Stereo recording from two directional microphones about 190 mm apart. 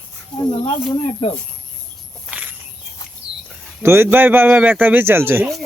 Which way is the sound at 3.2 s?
70° right (ahead or behind).